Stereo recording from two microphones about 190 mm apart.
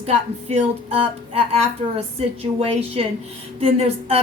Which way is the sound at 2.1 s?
30° right (ahead or behind).